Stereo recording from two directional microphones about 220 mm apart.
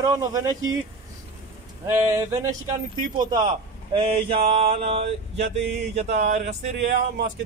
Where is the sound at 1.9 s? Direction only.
15° right (ahead or behind).